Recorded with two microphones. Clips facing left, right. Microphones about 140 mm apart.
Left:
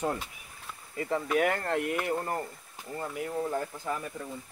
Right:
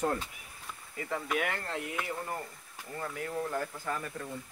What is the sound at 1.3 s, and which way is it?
Speech, 45° left (ahead or behind).